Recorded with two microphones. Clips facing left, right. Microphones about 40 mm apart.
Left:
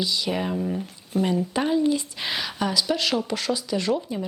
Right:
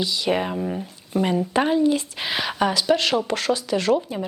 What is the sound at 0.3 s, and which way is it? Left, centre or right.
Speech, right.